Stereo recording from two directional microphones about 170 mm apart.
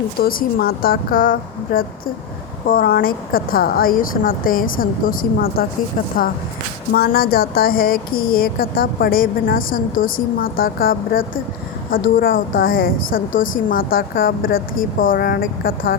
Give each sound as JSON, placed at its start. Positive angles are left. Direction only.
{"t": 0.2, "sound": "speech", "side_deg": 60}
{"t": 6.9, "sound": "speech", "side_deg": 60}